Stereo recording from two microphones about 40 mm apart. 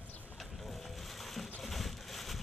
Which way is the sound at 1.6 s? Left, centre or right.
Centre.